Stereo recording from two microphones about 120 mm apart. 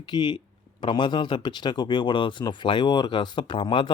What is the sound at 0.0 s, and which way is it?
Speech, 40° left (ahead or behind).